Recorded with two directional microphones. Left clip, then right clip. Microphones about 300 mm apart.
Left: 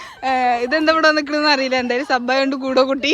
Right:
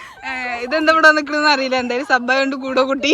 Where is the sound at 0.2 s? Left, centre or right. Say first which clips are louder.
Left 7 dB; centre.